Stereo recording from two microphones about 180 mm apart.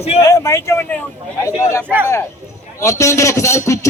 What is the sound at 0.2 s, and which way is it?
A man's voice, 15° left (ahead or behind).